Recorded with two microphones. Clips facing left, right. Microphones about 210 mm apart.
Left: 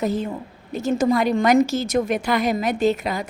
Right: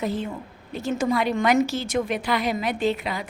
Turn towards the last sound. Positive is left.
turn(degrees=45)  # may be behind; listen again after turning